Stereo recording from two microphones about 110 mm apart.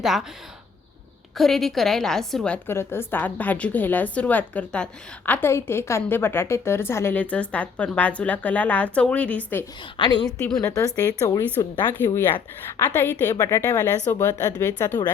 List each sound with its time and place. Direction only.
0.0 s a woman's voice: 5° right (ahead or behind)
1.4 s a woman's voice: 5° left (ahead or behind)
2.6 s a woman's voice: 20° left (ahead or behind)
10.0 s a woman's voice: 45° left (ahead or behind)
10.6 s a woman's voice: 25° left (ahead or behind)